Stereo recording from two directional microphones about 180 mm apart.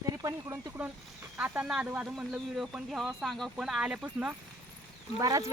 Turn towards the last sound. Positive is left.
turn(degrees=-20)  # may be behind; listen again after turning